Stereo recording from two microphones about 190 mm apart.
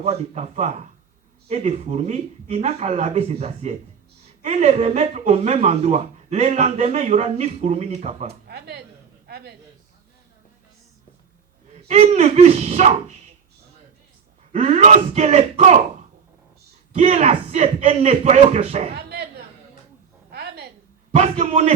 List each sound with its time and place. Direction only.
0.0 s speech: 35° right (ahead or behind)
8.4 s a man's voice: 60° right (ahead or behind)
11.9 s speech: 35° right (ahead or behind)
14.5 s speech: 35° right (ahead or behind)
16.9 s speech: 35° right (ahead or behind)
18.9 s a sound: 55° right (ahead or behind)
20.3 s a sound: 60° right (ahead or behind)
21.1 s speech: 35° right (ahead or behind)